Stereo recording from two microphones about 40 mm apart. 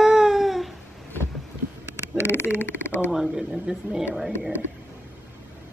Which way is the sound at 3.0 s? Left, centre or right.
Centre.